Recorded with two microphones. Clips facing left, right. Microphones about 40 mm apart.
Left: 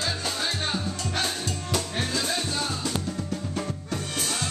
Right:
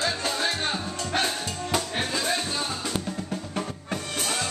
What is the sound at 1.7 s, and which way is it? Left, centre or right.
Music, right.